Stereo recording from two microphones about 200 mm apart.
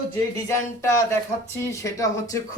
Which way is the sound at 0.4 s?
15° left (ahead or behind).